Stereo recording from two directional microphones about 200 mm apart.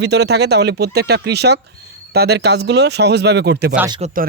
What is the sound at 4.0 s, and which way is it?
Speech, 45° right (ahead or behind).